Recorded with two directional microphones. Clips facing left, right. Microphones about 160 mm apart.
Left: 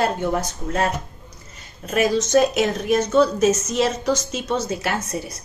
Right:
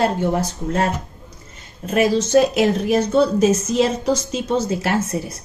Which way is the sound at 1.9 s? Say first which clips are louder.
Right 2 dB; 30° right (ahead or behind).